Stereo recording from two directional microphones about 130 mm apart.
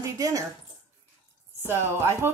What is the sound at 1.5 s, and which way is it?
Speech, 20° right (ahead or behind).